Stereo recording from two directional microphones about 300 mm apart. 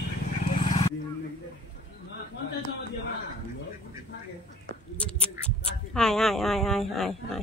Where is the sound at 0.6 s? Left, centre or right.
Left.